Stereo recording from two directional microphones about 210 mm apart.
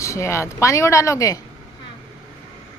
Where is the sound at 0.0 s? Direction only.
15° left (ahead or behind).